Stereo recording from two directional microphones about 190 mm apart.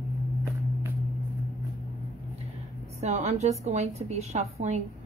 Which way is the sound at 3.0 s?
35° right (ahead or behind).